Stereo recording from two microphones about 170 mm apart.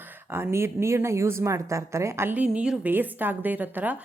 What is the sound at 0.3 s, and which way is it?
A woman's voice, 15° right (ahead or behind).